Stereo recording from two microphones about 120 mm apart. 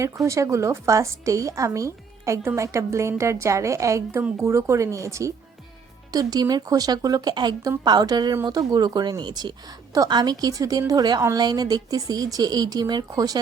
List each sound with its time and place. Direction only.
0.0 s a woman's voice: 25° right (ahead or behind)